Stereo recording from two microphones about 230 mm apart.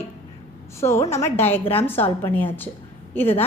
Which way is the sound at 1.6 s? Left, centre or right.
Left.